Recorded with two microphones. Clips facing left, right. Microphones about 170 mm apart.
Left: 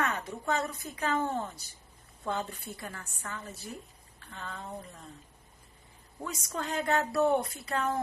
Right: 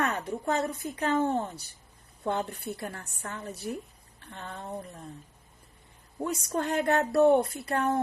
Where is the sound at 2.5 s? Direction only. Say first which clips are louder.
Right 6 dB; 65° right (ahead or behind).